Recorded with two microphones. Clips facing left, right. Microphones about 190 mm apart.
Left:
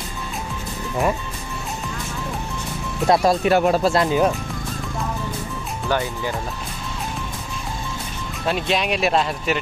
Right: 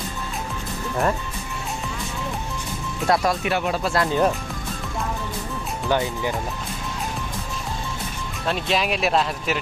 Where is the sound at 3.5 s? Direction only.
45° left (ahead or behind).